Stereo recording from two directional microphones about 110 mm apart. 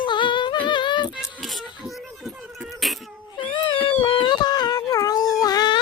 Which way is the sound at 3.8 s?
45° left (ahead or behind).